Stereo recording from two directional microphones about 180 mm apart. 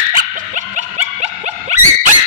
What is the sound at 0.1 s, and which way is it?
Dog, 45° right (ahead or behind).